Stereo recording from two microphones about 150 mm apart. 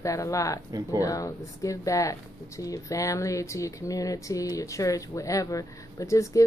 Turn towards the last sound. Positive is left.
turn(degrees=20)  # may be behind; listen again after turning